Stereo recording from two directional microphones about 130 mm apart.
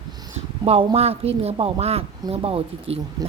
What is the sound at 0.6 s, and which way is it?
Speech, 50° right (ahead or behind).